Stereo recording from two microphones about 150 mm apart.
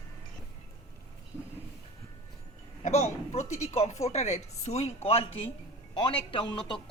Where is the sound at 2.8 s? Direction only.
50° left (ahead or behind).